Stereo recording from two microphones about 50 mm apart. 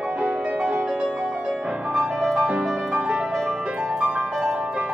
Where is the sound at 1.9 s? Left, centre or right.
Centre.